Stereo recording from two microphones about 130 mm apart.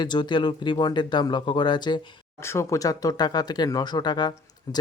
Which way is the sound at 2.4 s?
20° left (ahead or behind).